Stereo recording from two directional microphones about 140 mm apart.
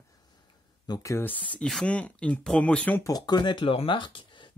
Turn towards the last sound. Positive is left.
turn(degrees=35)  # may be behind; listen again after turning